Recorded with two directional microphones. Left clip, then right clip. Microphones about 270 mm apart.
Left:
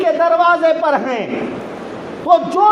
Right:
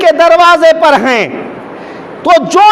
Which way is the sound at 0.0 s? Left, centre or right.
Right.